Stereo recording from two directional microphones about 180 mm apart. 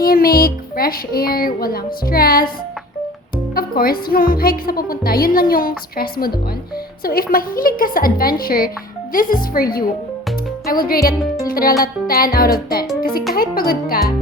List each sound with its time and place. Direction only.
0.0 s speech: 55° left (ahead or behind)
3.5 s a woman's voice: 55° left (ahead or behind)